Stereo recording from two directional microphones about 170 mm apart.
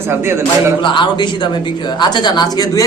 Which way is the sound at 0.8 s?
30° left (ahead or behind).